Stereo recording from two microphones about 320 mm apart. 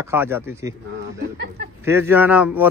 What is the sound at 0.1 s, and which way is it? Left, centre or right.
Speech, centre.